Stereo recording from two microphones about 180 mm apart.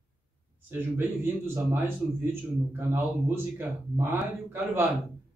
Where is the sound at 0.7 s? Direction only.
15° right (ahead or behind).